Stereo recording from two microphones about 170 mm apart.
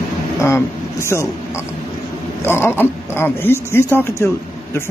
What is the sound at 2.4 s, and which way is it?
A man's voice, 15° left (ahead or behind).